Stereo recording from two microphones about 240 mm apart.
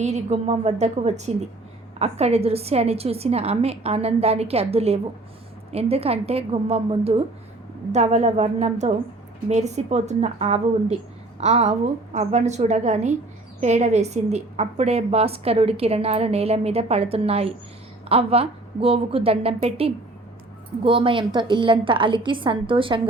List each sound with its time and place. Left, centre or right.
0.0 s a woman's voice: right